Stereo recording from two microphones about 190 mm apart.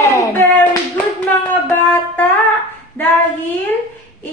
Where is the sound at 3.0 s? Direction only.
10° left (ahead or behind).